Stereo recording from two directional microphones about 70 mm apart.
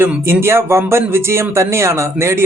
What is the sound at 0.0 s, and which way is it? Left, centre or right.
Speech, right.